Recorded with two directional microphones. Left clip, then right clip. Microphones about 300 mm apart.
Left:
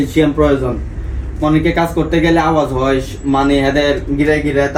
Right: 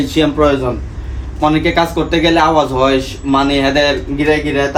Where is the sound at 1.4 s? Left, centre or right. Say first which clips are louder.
Right 1 dB; centre.